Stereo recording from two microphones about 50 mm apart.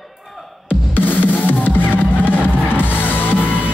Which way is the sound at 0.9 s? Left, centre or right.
Left.